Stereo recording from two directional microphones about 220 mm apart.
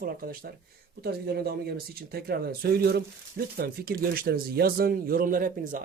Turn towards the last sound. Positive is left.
turn(degrees=-40)  # may be behind; listen again after turning